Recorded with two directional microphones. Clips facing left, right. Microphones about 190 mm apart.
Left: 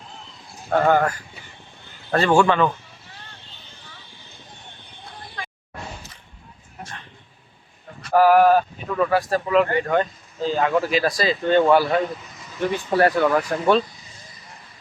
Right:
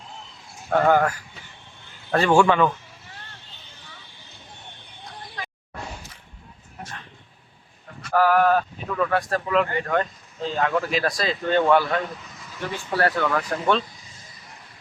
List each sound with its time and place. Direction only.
0.7 s a man's voice: centre (ahead or behind)
8.1 s speech: 10° left (ahead or behind)